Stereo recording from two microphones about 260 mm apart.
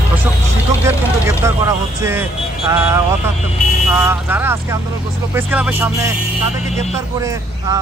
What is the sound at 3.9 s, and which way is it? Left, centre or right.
A man's voice, centre.